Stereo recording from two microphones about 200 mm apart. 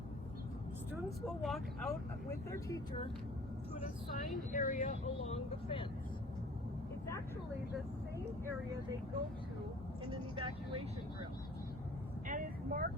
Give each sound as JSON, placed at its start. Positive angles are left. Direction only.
{"t": 1.4, "sound": "speech", "side_deg": 0}
{"t": 2.5, "sound": "speech", "side_deg": 15}
{"t": 4.5, "sound": "speech", "side_deg": 40}
{"t": 10.1, "sound": "speech", "side_deg": -25}
{"t": 12.3, "sound": "speech", "side_deg": -45}